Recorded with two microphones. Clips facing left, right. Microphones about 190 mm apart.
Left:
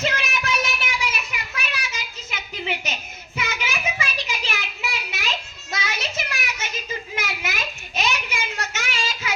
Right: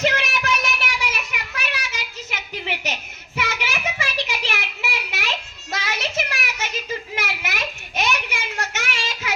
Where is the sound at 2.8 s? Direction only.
65° right (ahead or behind).